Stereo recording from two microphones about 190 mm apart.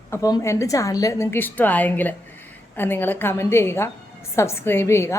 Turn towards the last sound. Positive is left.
turn(degrees=15)  # may be behind; listen again after turning